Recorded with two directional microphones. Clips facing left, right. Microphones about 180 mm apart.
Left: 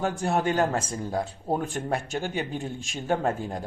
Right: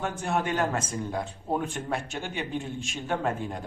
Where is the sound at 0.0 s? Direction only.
35° left (ahead or behind).